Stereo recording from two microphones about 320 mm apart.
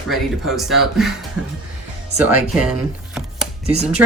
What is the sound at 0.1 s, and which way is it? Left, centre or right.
Speech, centre.